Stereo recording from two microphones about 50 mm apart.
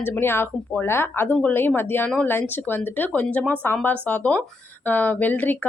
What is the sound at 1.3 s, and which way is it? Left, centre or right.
A woman's voice, left.